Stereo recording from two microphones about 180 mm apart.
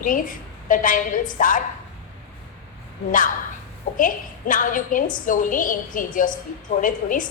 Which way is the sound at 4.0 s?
50° left (ahead or behind).